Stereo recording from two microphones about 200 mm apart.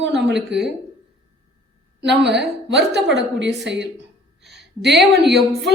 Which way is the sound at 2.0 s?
60° right (ahead or behind).